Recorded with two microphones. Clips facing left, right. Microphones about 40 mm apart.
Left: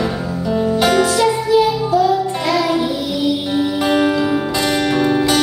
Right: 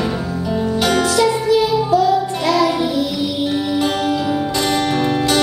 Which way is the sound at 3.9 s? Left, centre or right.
Left.